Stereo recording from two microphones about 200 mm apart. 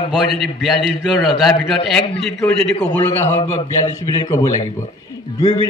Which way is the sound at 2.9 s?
10° left (ahead or behind).